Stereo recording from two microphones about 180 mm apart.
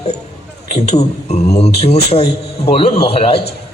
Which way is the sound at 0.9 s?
35° left (ahead or behind).